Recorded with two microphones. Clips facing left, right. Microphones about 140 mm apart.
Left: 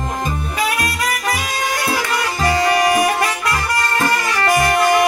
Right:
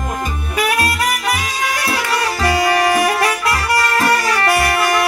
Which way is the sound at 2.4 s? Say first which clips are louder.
Even; 20° left (ahead or behind).